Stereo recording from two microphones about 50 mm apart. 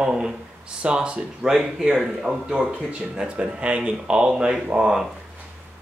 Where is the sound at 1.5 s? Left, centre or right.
Centre.